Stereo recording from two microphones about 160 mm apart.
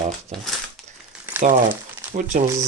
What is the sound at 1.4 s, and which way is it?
Speech, 50° right (ahead or behind).